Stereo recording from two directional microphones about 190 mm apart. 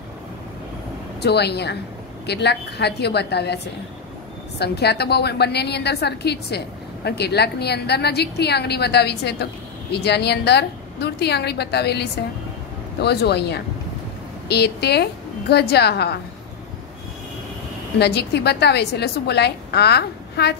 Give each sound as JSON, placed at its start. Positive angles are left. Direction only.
{"t": 1.2, "sound": "a woman's voice", "side_deg": 60}
{"t": 4.6, "sound": "a woman's voice", "side_deg": 60}
{"t": 17.9, "sound": "a woman's voice", "side_deg": 60}